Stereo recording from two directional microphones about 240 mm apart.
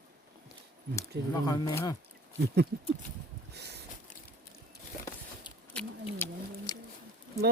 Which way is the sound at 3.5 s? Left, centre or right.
Right.